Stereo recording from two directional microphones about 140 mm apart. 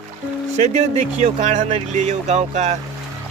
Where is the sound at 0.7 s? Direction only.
55° right (ahead or behind).